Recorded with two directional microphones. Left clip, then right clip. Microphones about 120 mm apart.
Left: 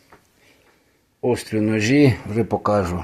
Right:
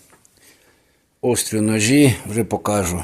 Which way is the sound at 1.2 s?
30° right (ahead or behind).